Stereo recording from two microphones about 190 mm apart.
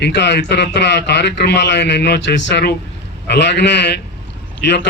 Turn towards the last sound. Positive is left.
turn(degrees=60)  # may be behind; listen again after turning